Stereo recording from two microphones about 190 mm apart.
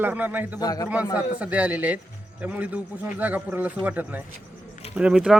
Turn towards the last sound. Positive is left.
turn(degrees=-5)  # may be behind; listen again after turning